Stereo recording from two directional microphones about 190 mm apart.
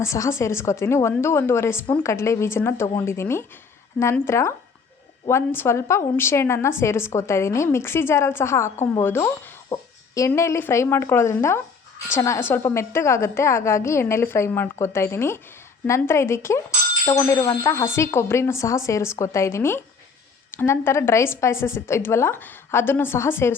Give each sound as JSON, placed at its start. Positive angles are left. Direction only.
{"t": 0.0, "sound": "a woman's voice", "side_deg": 15}